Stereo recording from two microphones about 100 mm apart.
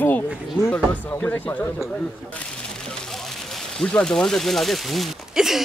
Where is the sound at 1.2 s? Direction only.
20° left (ahead or behind).